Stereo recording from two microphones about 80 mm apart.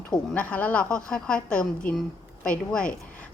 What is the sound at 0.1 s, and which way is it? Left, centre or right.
A woman's voice, centre.